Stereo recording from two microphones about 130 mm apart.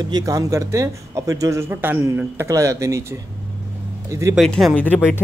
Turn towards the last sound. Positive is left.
turn(degrees=15)  # may be behind; listen again after turning